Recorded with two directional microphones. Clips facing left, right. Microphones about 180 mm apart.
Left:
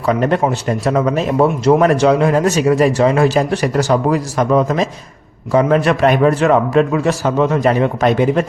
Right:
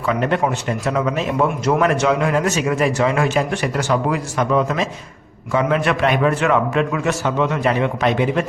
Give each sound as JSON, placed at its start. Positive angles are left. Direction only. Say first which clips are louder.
{"t": 0.0, "sound": "a man's voice", "louder": "left 4 dB", "side_deg": 40}